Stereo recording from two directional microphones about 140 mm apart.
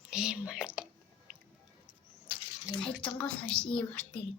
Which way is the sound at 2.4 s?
30° left (ahead or behind).